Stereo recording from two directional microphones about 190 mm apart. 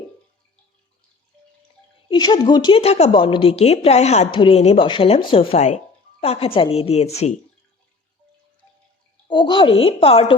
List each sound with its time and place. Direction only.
2.0 s speech: 25° left (ahead or behind)
9.2 s a woman's voice: 25° left (ahead or behind)